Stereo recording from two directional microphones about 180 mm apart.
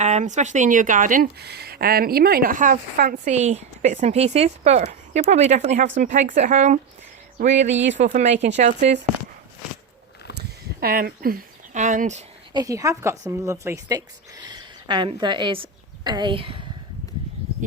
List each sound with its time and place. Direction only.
0.0 s speech: 40° right (ahead or behind)
7.7 s speech: 85° right
8.0 s speech: 40° right (ahead or behind)
10.3 s a sound: 55° right (ahead or behind)
12.5 s a woman's voice: 20° right (ahead or behind)